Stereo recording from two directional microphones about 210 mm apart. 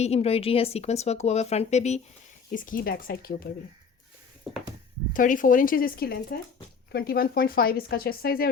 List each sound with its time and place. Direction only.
0.0 s speech: 30° left (ahead or behind)
5.1 s speech: 40° left (ahead or behind)